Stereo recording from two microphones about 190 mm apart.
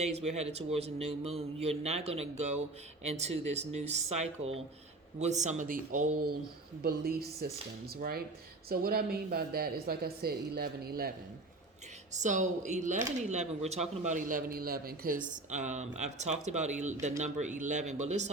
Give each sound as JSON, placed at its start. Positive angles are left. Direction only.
{"t": 0.0, "sound": "speech", "side_deg": -35}
{"t": 12.2, "sound": "speech", "side_deg": -40}